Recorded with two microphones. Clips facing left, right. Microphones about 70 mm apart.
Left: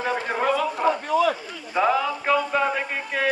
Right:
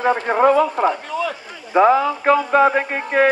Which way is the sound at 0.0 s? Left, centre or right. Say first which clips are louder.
Right 8 dB; right.